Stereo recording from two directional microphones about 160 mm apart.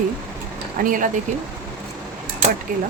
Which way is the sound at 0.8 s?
55° right (ahead or behind).